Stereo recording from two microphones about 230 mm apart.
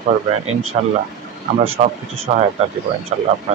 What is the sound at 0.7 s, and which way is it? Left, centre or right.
Speech, right.